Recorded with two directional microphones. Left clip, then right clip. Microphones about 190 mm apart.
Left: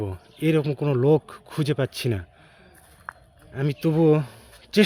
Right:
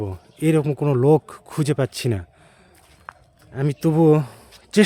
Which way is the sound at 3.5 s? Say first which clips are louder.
Right 3 dB; 25° right (ahead or behind).